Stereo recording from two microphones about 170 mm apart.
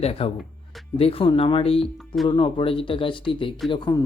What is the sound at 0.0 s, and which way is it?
Speech, 35° left (ahead or behind).